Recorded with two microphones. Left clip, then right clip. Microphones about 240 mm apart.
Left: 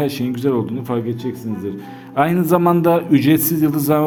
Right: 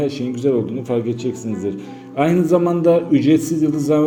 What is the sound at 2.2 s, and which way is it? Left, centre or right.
A man's voice, left.